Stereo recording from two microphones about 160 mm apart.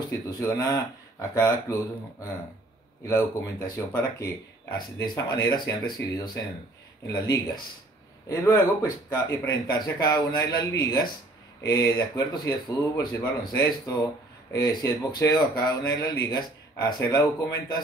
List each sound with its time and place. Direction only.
0.4 s speech: 25° left (ahead or behind)
3.1 s speech: 20° left (ahead or behind)